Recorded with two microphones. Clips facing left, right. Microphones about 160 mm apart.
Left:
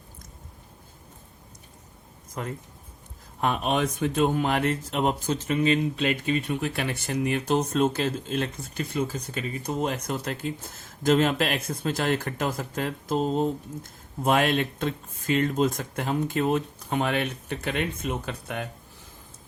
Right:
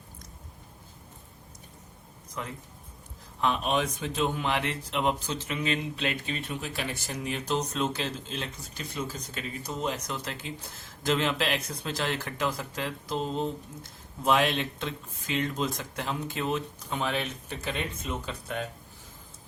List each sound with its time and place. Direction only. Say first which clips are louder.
2.3 s speech: left 4 dB; 50° left (ahead or behind)